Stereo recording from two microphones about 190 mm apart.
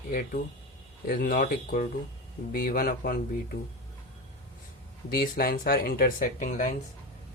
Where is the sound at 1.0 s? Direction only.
50° left (ahead or behind).